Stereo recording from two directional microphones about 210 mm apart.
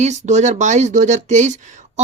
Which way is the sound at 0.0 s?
35° right (ahead or behind).